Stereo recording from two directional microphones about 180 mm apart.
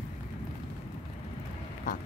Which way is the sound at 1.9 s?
45° left (ahead or behind).